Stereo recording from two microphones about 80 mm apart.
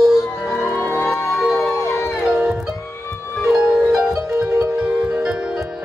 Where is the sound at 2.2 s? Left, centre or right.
Centre.